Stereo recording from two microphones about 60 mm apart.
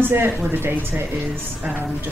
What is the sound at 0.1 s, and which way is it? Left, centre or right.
Speech, right.